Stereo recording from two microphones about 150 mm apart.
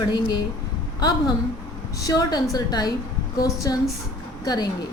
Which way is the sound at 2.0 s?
25° left (ahead or behind).